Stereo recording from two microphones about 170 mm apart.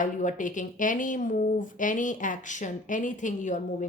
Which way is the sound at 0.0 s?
50° left (ahead or behind).